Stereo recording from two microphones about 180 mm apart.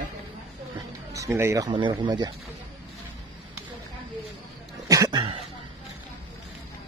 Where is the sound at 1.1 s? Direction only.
15° right (ahead or behind).